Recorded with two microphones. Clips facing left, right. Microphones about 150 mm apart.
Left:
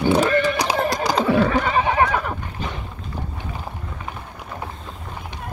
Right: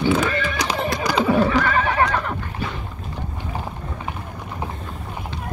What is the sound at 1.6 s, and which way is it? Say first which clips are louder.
Neigh: left 1 dB; 20° left (ahead or behind).